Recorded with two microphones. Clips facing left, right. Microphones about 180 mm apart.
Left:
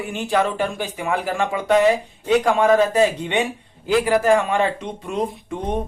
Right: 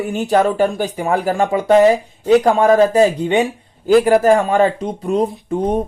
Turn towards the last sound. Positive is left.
turn(degrees=-40)  # may be behind; listen again after turning